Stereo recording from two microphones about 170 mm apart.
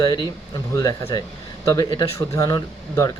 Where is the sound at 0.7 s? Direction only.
20° left (ahead or behind).